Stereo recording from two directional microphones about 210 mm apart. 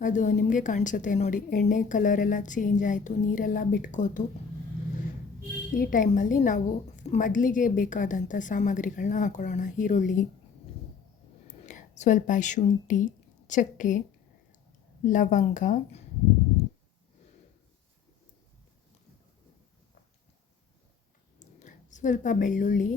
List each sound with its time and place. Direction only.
0.0 s a woman's voice: 35° left (ahead or behind)
5.7 s a woman's voice: 40° left (ahead or behind)
11.4 s a woman's voice: 35° left (ahead or behind)
15.0 s a woman's voice: 35° left (ahead or behind)
21.3 s a sound: 35° left (ahead or behind)